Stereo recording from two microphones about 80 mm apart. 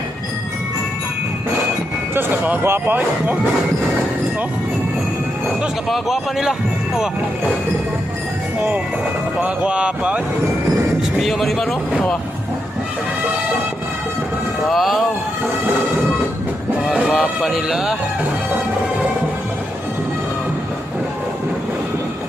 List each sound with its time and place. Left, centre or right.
2.1 s speech: right
5.9 s speech: centre
9.4 s speech: centre
11.2 s speech: centre
14.7 s speech: centre
17.2 s speech: centre